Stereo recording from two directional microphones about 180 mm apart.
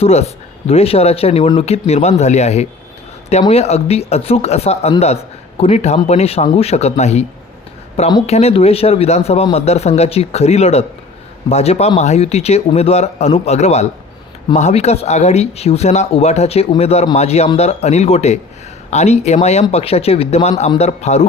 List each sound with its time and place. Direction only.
0.0 s speech: 35° left (ahead or behind)
8.3 s speech: 35° left (ahead or behind)